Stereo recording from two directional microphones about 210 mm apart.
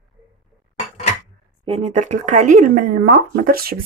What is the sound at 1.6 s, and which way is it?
Speech, 30° right (ahead or behind).